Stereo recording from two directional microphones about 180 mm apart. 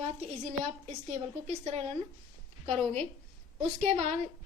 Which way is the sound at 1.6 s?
35° right (ahead or behind).